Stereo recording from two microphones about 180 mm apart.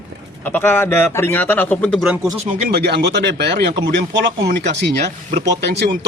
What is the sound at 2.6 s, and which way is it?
Speech, 65° right (ahead or behind).